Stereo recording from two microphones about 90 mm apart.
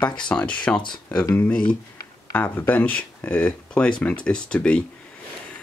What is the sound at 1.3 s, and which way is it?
Speech, 15° left (ahead or behind).